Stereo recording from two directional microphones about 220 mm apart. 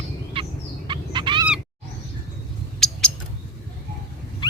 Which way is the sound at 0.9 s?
20° right (ahead or behind).